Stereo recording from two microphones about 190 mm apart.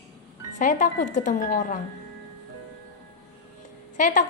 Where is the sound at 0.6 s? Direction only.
40° left (ahead or behind).